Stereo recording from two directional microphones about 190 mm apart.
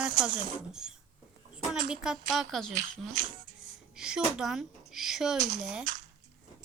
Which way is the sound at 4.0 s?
5° right (ahead or behind).